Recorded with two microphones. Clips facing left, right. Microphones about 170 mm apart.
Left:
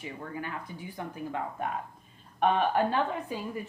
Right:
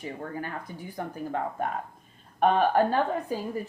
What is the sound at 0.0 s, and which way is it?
A woman's voice, 40° right (ahead or behind).